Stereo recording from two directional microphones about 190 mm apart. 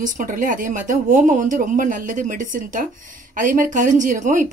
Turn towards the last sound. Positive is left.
turn(degrees=-40)  # may be behind; listen again after turning